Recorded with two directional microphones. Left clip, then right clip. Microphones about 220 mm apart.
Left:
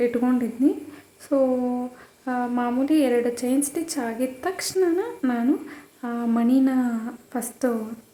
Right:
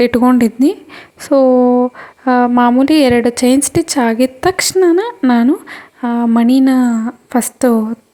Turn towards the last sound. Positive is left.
turn(degrees=-40)  # may be behind; listen again after turning